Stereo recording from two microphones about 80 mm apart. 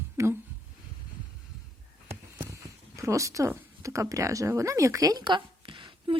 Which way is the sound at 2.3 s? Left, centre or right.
Right.